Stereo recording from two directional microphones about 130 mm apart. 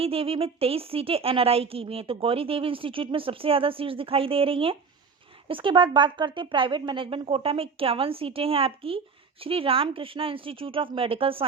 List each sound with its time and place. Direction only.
0.0 s speech: 45° right (ahead or behind)